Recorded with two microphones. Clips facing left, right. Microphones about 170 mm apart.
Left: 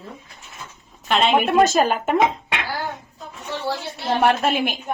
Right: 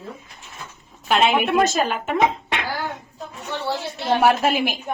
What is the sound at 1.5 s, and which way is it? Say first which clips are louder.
Speech: left 3 dB; 40° left (ahead or behind).